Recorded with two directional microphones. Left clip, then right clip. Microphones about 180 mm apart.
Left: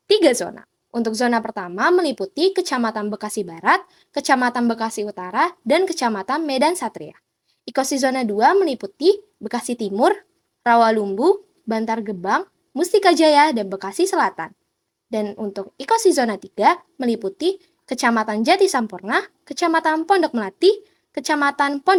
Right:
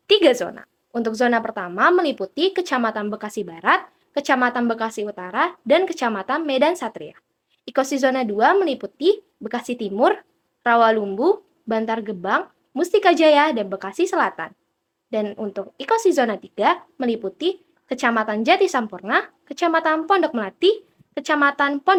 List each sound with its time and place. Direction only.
0.1 s a woman's voice: 50° left (ahead or behind)